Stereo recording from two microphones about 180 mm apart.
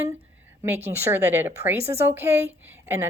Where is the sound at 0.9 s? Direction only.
10° right (ahead or behind).